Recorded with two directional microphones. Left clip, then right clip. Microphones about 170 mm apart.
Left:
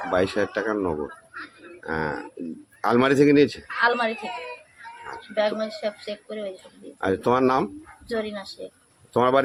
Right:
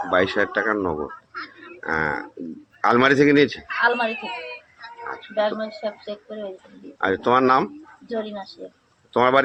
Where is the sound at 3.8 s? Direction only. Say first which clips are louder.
Right 1 dB; 20° left (ahead or behind).